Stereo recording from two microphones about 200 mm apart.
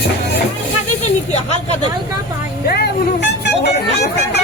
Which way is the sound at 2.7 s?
50° left (ahead or behind).